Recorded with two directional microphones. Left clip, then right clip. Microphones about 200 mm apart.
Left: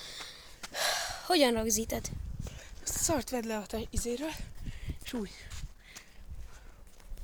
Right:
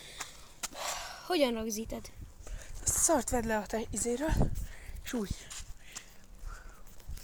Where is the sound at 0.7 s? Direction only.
50° left (ahead or behind).